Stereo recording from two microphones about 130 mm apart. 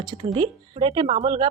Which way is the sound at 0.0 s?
35° right (ahead or behind).